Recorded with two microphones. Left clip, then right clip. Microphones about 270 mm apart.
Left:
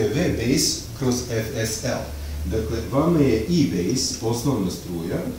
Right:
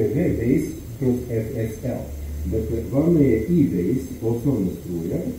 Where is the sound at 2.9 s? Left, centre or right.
Left.